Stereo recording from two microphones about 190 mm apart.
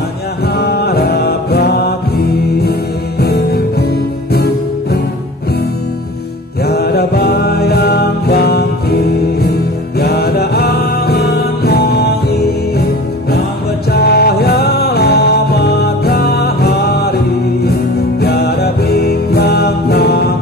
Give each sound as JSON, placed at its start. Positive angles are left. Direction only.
{"t": 0.5, "sound": "music", "side_deg": 55}
{"t": 6.6, "sound": "mantra", "side_deg": 55}
{"t": 9.9, "sound": "music", "side_deg": 55}
{"t": 13.8, "sound": "music", "side_deg": 55}
{"t": 18.2, "sound": "music", "side_deg": 55}